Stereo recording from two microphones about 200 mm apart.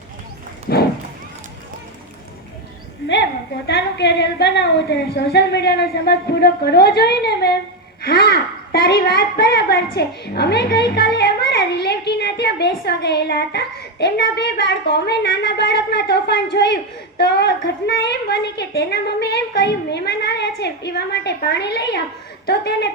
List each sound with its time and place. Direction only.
0.7 s run: 50° left (ahead or behind)
3.1 s a woman's voice: 60° left (ahead or behind)